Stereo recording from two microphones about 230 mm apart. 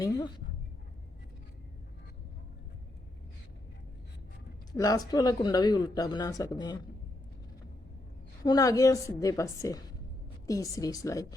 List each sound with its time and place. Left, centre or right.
0.0 s speech: centre
4.7 s speech: centre
8.4 s speech: centre